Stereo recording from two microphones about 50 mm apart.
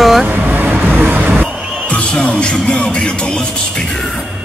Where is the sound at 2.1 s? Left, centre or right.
Left.